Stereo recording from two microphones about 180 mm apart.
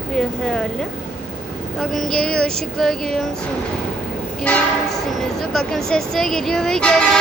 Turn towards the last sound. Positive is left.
turn(degrees=5)  # may be behind; listen again after turning